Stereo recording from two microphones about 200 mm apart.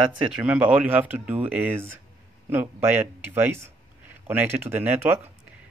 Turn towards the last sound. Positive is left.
turn(degrees=-10)  # may be behind; listen again after turning